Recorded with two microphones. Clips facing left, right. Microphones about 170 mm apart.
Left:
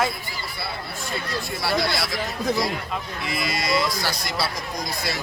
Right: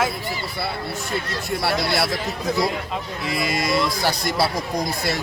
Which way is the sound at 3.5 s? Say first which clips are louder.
Right 1 dB; 50° right (ahead or behind).